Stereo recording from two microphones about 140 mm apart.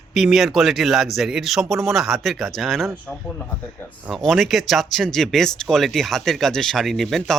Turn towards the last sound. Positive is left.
turn(degrees=0)  # may be behind; listen again after turning